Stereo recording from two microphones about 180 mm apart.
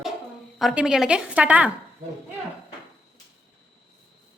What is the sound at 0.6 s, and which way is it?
A woman's voice, 5° right (ahead or behind).